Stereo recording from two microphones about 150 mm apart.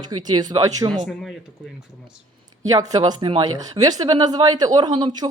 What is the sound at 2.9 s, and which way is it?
Speech, 30° right (ahead or behind).